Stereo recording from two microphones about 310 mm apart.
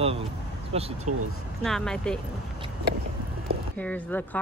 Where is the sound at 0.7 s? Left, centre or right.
Centre.